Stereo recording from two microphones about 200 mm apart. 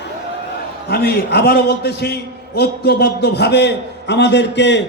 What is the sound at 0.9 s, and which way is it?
A man's voice, 55° left (ahead or behind).